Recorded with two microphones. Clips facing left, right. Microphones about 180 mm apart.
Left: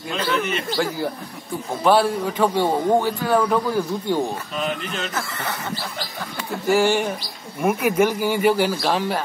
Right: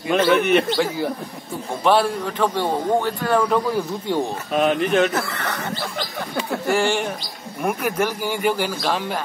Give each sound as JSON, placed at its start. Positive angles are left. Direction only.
{"t": 0.3, "sound": "speech", "side_deg": -65}
{"t": 1.9, "sound": "a man's voice", "side_deg": 0}
{"t": 4.5, "sound": "speech", "side_deg": -60}
{"t": 6.7, "sound": "speech", "side_deg": 5}